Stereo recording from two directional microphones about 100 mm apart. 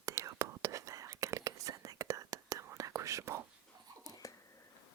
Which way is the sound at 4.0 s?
35° left (ahead or behind).